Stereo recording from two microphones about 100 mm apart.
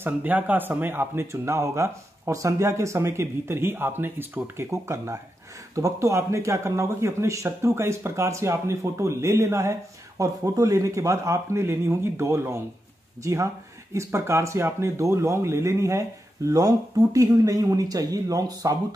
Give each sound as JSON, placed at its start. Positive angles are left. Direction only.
{"t": 0.0, "sound": "speech", "side_deg": -15}